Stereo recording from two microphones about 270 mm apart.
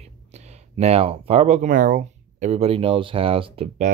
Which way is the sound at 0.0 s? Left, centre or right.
Right.